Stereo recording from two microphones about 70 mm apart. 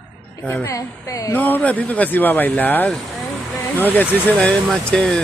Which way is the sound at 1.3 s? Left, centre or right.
Left.